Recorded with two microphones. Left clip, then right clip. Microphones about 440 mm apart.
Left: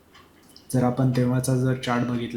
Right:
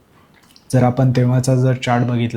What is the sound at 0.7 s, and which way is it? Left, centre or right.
Speech, right.